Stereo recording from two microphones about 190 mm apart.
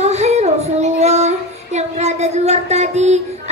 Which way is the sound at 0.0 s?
35° right (ahead or behind).